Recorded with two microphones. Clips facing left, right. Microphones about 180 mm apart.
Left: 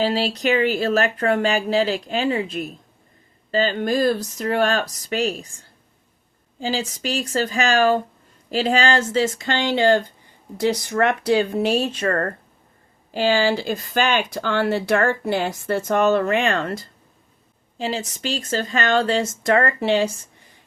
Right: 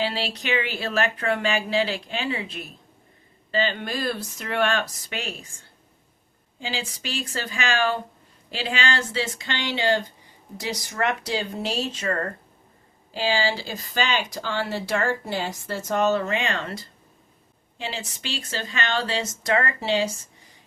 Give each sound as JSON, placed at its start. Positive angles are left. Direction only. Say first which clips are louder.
{"t": 0.0, "sound": "speech", "louder": "left 7 dB", "side_deg": 40}
{"t": 6.6, "sound": "speech", "louder": "left 7 dB", "side_deg": 40}